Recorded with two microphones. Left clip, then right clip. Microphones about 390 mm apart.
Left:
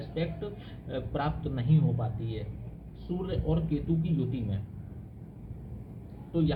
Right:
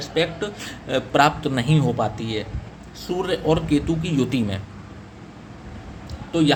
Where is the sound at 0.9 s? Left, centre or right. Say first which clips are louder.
Right 16 dB; right.